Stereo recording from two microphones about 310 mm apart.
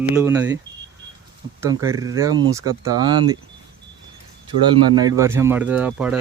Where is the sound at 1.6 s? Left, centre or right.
Centre.